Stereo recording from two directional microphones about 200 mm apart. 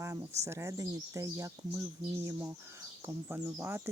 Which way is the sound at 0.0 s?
15° right (ahead or behind).